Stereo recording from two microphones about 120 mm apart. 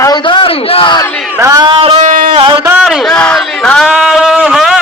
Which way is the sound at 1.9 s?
90° right.